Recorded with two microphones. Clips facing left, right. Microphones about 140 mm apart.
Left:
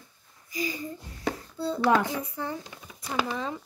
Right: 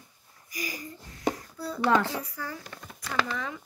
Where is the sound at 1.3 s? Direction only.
25° left (ahead or behind).